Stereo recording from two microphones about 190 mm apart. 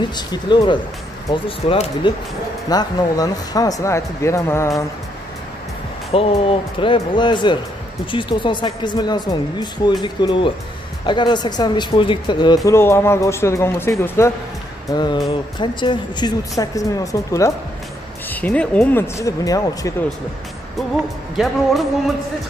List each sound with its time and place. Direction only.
0.1 s a woman's voice: 20° left (ahead or behind)
6.1 s a woman's voice: 30° left (ahead or behind)
21.4 s speech: centre (ahead or behind)